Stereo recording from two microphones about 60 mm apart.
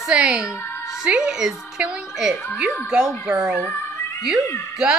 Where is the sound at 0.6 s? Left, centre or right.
Left.